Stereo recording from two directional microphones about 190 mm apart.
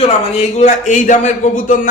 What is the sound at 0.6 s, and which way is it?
A man's voice, 40° left (ahead or behind).